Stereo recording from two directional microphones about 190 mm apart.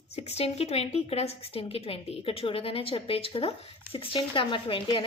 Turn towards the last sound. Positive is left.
turn(degrees=25)  # may be behind; listen again after turning